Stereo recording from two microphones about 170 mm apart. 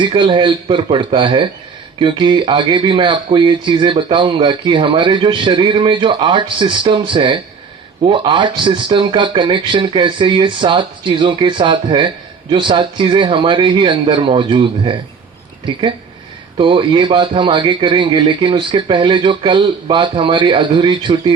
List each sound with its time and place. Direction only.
0.0 s speech: 30° right (ahead or behind)